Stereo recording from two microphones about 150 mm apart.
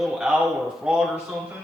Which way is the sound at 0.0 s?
5° right (ahead or behind).